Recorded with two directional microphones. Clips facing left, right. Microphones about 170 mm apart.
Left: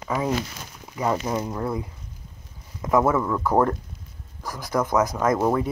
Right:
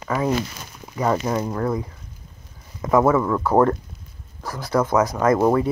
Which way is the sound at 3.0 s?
5° right (ahead or behind).